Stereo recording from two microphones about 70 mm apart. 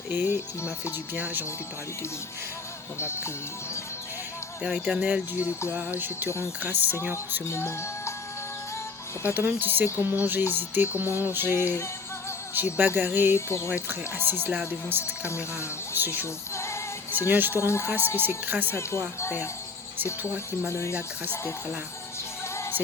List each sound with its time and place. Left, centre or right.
0.1 s speech: right
3.0 s music: left
4.6 s speech: centre
5.5 s music: left
5.7 s speech: right
7.4 s music: left
9.2 s speech: right
16.2 s music: left
17.2 s speech: right
17.6 s music: left
18.2 s speech: right
18.7 s music: left
20.7 s music: left